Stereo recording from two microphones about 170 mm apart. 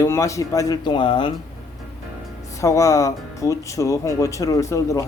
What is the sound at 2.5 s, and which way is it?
Speech, 20° left (ahead or behind).